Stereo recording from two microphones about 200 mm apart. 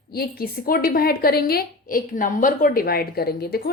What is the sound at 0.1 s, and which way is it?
A woman's voice, 50° left (ahead or behind).